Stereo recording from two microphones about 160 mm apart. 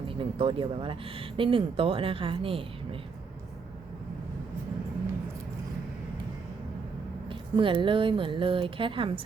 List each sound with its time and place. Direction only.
0.1 s speech: 35° right (ahead or behind)
7.3 s speech: 30° right (ahead or behind)